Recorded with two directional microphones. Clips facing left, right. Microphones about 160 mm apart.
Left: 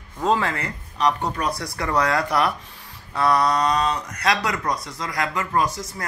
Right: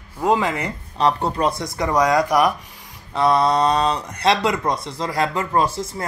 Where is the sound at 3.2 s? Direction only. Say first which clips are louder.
Right 3 dB; 25° right (ahead or behind).